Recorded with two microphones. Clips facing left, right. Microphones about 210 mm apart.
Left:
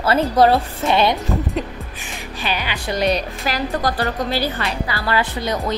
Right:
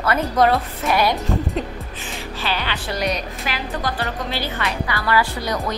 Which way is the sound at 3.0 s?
35° left (ahead or behind).